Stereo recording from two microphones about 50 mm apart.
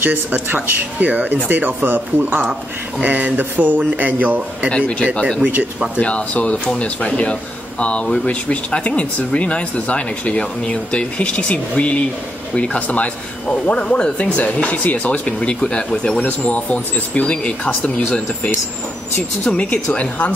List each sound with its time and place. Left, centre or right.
0.0 s speech: right
4.6 s speech: left
19.5 s speech: left